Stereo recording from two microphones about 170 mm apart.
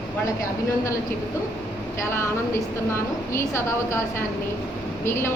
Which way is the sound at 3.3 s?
15° left (ahead or behind).